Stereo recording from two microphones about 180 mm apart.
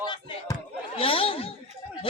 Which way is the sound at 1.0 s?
30° left (ahead or behind).